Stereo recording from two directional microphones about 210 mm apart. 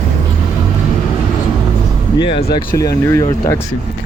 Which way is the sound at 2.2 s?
25° left (ahead or behind).